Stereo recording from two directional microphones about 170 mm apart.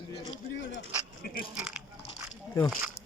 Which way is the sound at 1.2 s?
65° left (ahead or behind).